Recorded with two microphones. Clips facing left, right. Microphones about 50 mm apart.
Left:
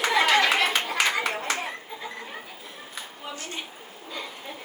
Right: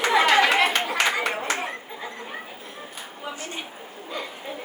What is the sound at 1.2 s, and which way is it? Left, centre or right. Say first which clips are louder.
Clapping: right 2 dB; centre.